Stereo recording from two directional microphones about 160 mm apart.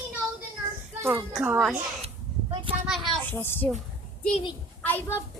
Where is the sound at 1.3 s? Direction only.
5° right (ahead or behind).